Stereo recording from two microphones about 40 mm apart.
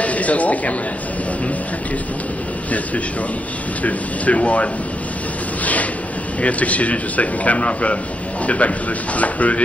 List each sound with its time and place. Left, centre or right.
0.0 s a man's voice: left
3.8 s a man's voice: left
6.4 s a man's voice: left